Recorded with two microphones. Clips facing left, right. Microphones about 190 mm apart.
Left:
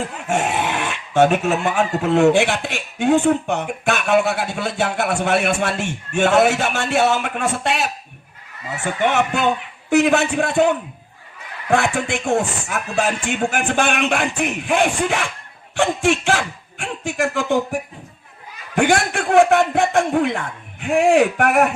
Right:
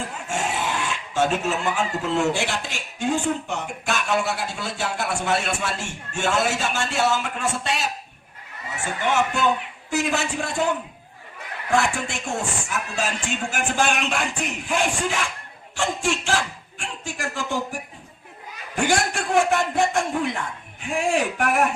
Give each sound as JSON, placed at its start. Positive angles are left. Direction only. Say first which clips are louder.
{"t": 0.3, "sound": "speech", "louder": "left 6 dB", "side_deg": 65}
{"t": 18.8, "sound": "speech", "louder": "left 5 dB", "side_deg": 60}